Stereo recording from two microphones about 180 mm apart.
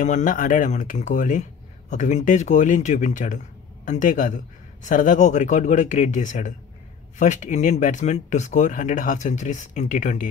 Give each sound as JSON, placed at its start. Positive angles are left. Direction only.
{"t": 0.0, "sound": "speech", "side_deg": 45}